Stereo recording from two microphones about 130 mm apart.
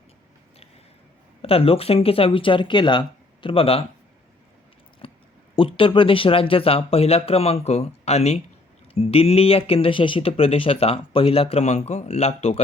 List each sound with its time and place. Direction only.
1.4 s speech: 45° left (ahead or behind)
5.0 s a sound: 45° left (ahead or behind)
5.5 s speech: 40° left (ahead or behind); by 12.6 s 55° left (ahead or behind)